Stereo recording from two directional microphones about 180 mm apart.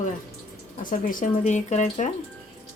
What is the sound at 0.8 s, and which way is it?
Speech, 50° left (ahead or behind).